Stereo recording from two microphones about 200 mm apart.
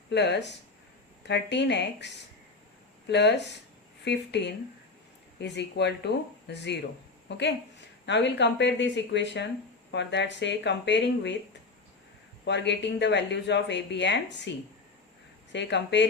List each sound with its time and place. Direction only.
0.1 s speech: 60° left (ahead or behind)
12.5 s speech: 60° left (ahead or behind)
15.5 s speech: 60° left (ahead or behind)